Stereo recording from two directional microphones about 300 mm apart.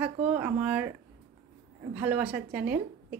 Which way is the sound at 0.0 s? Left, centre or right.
Centre.